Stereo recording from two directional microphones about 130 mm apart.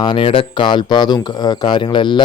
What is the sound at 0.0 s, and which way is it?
Speech, 40° left (ahead or behind).